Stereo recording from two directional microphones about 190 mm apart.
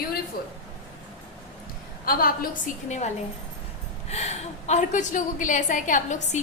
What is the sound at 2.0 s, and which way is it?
A woman's voice, 50° left (ahead or behind).